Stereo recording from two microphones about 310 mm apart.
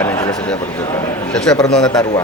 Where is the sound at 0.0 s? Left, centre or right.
Centre.